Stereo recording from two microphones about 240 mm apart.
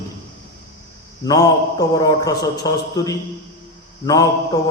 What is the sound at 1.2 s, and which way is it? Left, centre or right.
A man's voice, centre.